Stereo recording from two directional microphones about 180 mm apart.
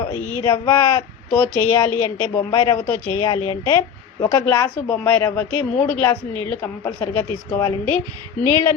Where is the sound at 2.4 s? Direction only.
25° left (ahead or behind).